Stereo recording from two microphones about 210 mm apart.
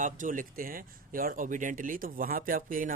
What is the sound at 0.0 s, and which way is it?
Speech, 40° right (ahead or behind).